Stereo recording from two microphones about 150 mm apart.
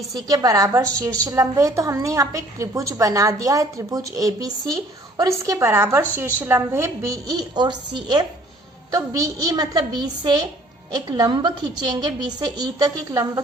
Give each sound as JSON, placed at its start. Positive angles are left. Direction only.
{"t": 0.3, "sound": "a woman's voice", "side_deg": -25}